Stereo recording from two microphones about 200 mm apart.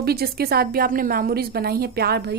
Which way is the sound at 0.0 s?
50° right (ahead or behind).